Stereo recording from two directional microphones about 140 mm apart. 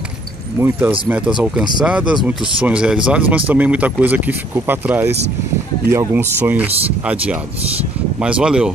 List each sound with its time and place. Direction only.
0.6 s speech: 15° right (ahead or behind)